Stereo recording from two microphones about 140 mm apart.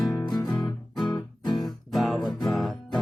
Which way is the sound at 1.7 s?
Centre (ahead or behind).